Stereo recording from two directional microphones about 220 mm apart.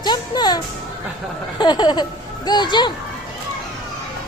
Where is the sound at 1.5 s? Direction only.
20° left (ahead or behind).